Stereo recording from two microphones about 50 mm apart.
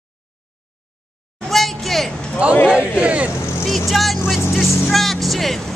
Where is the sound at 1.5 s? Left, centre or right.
Centre.